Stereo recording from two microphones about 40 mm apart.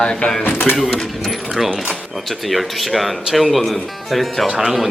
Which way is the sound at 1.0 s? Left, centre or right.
Centre.